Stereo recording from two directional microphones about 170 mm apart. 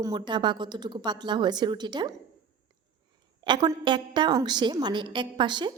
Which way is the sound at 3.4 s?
25° right (ahead or behind).